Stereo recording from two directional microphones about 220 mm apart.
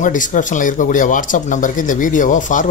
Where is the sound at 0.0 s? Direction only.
35° left (ahead or behind).